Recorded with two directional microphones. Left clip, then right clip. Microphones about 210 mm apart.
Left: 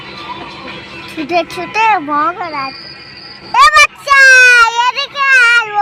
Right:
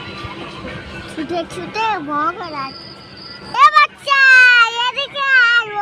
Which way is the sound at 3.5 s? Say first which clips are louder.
Left 4 dB; 20° left (ahead or behind).